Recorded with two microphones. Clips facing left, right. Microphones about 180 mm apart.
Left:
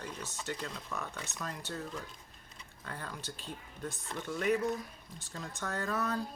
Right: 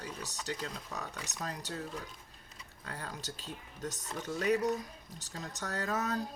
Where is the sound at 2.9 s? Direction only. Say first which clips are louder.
Even; 40° right (ahead or behind).